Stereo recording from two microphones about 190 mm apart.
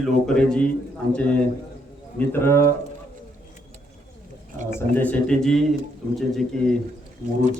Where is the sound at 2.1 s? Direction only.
10° left (ahead or behind).